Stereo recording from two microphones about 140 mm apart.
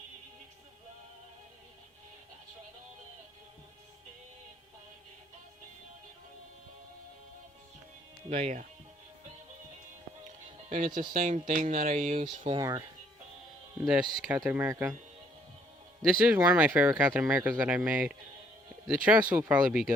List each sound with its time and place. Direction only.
8.3 s speech: 65° right (ahead or behind)
10.7 s speech: 75° right (ahead or behind)
11.4 s speech: 65° right (ahead or behind)
12.4 s speech: 50° right (ahead or behind)
13.7 s speech: 5° right (ahead or behind)
16.0 s speech: 10° right (ahead or behind)